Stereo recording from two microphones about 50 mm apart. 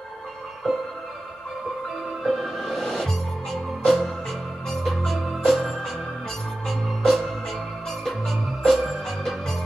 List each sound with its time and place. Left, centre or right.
2.2 s music: centre
6.7 s organ: centre
8.0 s music: centre